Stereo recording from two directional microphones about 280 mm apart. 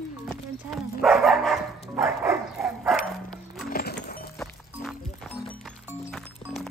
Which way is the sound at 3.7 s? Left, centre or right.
Left.